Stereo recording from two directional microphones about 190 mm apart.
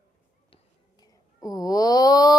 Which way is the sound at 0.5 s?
20° left (ahead or behind).